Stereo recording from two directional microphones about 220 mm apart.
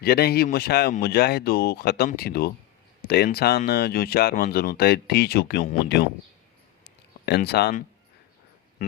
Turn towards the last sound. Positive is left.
turn(degrees=50)  # may be behind; listen again after turning